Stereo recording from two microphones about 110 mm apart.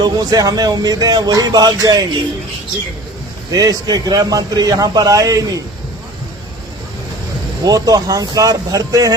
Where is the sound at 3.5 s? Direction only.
35° right (ahead or behind).